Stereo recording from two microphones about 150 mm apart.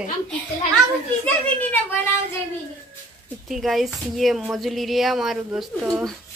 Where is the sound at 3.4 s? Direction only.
Centre (ahead or behind).